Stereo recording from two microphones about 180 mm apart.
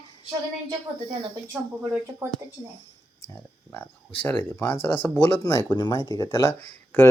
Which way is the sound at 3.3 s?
10° left (ahead or behind).